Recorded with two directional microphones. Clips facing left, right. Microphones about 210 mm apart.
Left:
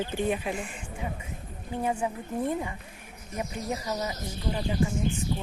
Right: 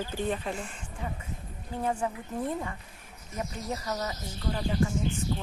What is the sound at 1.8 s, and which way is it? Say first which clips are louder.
Speech: left 1 dB; 10° left (ahead or behind).